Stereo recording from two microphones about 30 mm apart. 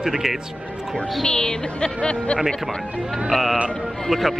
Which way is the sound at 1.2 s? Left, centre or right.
Left.